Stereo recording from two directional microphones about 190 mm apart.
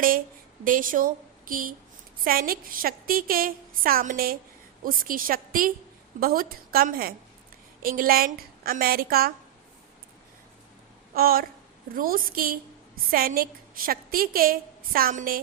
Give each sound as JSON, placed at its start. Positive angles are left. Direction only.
{"t": 0.6, "sound": "a woman's voice", "side_deg": -45}
{"t": 11.1, "sound": "a woman's voice", "side_deg": -50}